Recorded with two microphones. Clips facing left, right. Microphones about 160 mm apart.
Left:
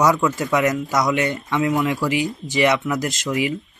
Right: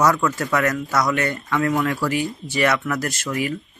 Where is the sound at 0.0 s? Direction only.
15° left (ahead or behind).